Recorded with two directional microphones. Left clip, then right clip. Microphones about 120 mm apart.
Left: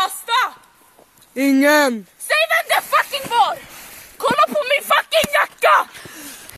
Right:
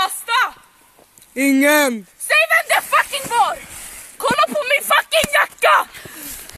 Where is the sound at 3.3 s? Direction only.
5° left (ahead or behind).